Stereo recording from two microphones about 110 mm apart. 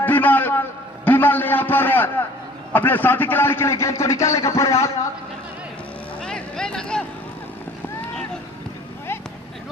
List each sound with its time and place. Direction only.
0.0 s a sound: 15° left (ahead or behind)
2.7 s a man's voice: 15° left (ahead or behind)
6.2 s vehicle: 5° left (ahead or behind)